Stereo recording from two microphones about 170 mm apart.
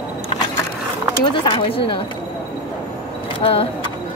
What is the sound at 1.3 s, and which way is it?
Speech, 30° left (ahead or behind).